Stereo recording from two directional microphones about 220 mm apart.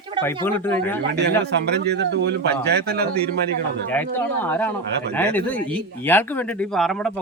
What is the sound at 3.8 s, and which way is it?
Speech, 10° left (ahead or behind).